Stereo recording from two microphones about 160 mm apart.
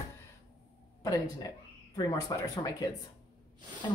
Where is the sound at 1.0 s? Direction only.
25° left (ahead or behind).